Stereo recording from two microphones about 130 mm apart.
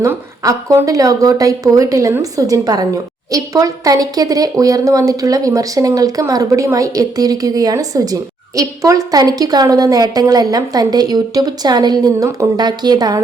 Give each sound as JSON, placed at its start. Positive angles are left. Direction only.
{"t": 0.0, "sound": "a woman's voice", "side_deg": -25}